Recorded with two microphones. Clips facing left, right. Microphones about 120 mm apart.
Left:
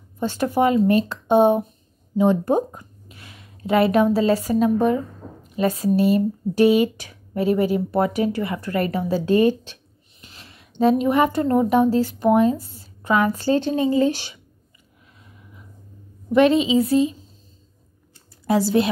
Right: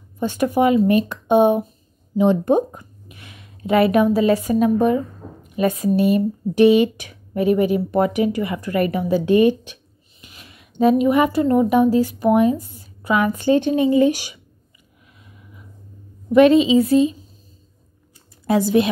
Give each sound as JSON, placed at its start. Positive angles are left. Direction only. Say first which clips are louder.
{"t": 0.2, "sound": "speech", "louder": "right 2 dB", "side_deg": -15}
{"t": 2.1, "sound": "a sound", "louder": "right 2 dB", "side_deg": -20}
{"t": 3.8, "sound": "speech", "louder": "right 2 dB", "side_deg": -15}
{"t": 11.9, "sound": "speech", "louder": "right 1 dB", "side_deg": -15}
{"t": 18.5, "sound": "speech", "louder": "right 2 dB", "side_deg": -20}